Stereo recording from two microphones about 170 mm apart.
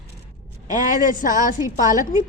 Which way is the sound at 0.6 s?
50° left (ahead or behind).